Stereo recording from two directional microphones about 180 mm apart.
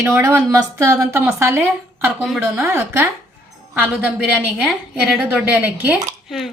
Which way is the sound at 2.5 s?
10° right (ahead or behind).